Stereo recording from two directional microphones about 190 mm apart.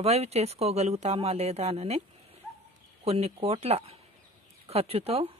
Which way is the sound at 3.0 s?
35° right (ahead or behind).